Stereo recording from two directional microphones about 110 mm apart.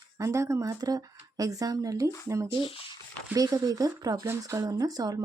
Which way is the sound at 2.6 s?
55° left (ahead or behind).